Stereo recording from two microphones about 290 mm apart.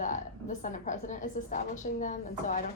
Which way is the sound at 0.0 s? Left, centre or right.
Left.